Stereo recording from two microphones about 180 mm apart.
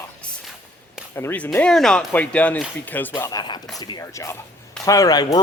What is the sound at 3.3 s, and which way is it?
A man's voice, 25° left (ahead or behind).